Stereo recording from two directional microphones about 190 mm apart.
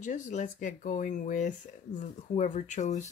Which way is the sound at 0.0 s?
40° left (ahead or behind).